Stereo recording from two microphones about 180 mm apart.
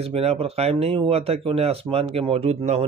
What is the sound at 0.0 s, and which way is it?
Speech, 35° right (ahead or behind).